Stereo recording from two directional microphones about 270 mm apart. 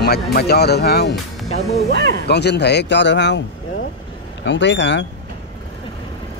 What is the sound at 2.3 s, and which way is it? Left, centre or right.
A man's voice, left.